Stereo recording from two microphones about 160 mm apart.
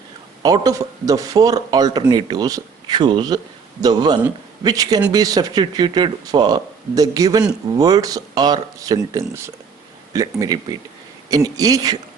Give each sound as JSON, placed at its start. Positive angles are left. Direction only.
{"t": 0.4, "sound": "a man's voice", "side_deg": -25}